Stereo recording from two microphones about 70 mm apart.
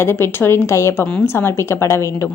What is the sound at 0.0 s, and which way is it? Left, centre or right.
A woman's voice, left.